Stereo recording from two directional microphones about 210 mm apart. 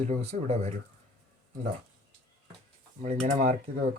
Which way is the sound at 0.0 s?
30° right (ahead or behind).